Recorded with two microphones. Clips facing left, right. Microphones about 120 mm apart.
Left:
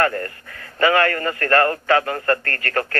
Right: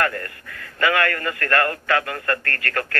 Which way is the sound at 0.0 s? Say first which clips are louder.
Left 3 dB; 35° left (ahead or behind).